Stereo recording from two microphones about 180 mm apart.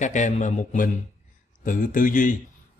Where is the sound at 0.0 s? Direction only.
45° left (ahead or behind).